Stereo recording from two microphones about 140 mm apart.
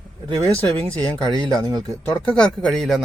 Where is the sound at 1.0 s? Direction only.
30° right (ahead or behind).